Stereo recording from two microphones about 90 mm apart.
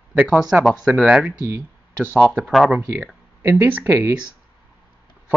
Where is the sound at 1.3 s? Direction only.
25° right (ahead or behind).